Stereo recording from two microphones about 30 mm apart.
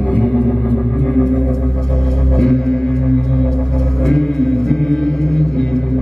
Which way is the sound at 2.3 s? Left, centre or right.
Centre.